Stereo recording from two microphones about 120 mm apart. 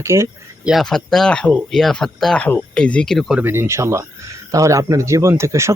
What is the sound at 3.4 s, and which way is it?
Speech, 20° right (ahead or behind).